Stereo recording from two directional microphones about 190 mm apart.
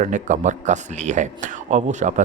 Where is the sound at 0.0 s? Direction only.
40° right (ahead or behind).